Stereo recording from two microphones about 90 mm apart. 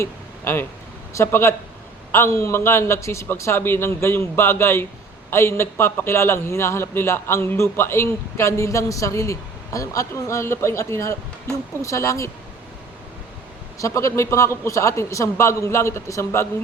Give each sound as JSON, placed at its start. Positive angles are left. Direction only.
{"t": 0.0, "sound": "a sound", "side_deg": 30}
{"t": 1.1, "sound": "a man's voice", "side_deg": 30}
{"t": 13.7, "sound": "a man's voice", "side_deg": 35}